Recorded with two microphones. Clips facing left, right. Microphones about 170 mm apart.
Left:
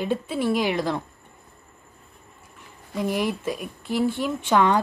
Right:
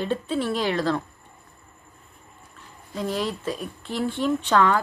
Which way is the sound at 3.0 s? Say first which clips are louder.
Left 2 dB; 15° left (ahead or behind).